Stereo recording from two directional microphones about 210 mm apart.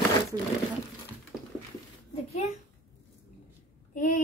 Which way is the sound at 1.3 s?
Centre (ahead or behind).